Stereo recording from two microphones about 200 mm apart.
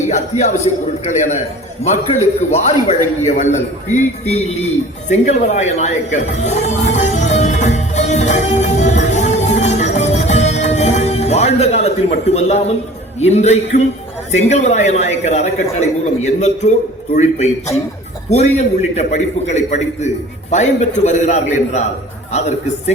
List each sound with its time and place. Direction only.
0.1 s a woman's voice: 35° left (ahead or behind)
5.0 s music: 35° left (ahead or behind)
13.1 s a woman's voice: 35° left (ahead or behind)